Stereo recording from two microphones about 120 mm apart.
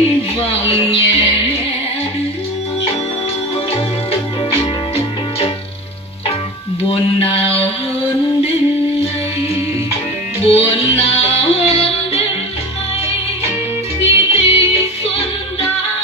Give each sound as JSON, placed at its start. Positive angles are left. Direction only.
{"t": 0.5, "sound": "music", "side_deg": 55}
{"t": 3.7, "sound": "music", "side_deg": 55}
{"t": 6.8, "sound": "mantra", "side_deg": 50}
{"t": 10.4, "sound": "music", "side_deg": 55}
{"t": 14.0, "sound": "music", "side_deg": 55}